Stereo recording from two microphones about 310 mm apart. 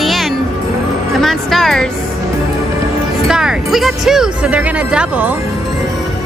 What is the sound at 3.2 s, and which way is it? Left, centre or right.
A woman's voice, centre.